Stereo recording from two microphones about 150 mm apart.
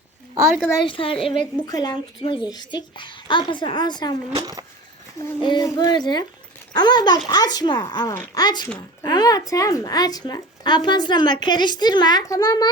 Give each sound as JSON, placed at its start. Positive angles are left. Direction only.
{"t": 0.9, "sound": "a woman's voice", "side_deg": 35}
{"t": 4.4, "sound": "speech", "side_deg": -25}
{"t": 5.4, "sound": "a woman's voice", "side_deg": 30}